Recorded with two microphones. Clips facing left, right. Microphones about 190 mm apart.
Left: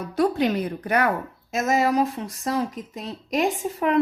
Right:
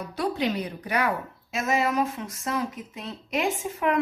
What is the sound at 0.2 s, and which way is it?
A woman's voice, 50° left (ahead or behind).